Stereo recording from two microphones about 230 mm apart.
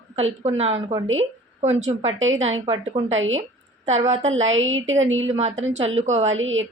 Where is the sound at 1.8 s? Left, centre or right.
Right.